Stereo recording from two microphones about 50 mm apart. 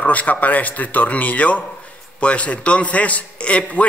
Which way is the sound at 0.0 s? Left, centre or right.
Left.